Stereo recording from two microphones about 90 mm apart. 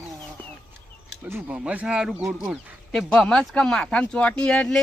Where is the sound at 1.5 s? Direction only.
15° right (ahead or behind).